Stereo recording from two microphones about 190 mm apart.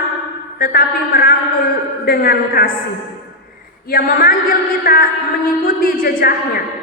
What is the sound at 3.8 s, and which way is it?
A woman's voice, 50° left (ahead or behind).